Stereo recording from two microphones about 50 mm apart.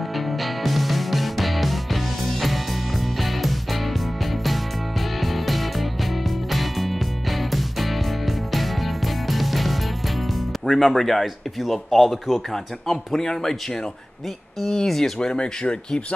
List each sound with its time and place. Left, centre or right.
0.1 s music: centre
3.2 s music: centre
10.6 s speech: centre
14.6 s speech: centre